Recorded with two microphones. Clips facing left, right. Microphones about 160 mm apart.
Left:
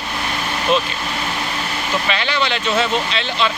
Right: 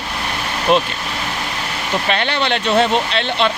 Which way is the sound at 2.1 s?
55° right (ahead or behind).